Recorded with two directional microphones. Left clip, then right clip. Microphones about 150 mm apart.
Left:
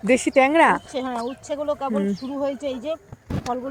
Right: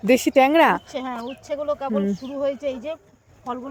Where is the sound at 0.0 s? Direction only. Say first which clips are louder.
Right 1 dB; 50° right (ahead or behind).